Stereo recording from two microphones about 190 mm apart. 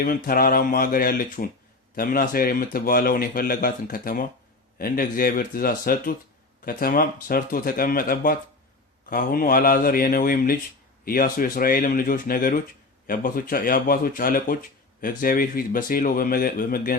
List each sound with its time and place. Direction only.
0.0 s speech: 50° left (ahead or behind)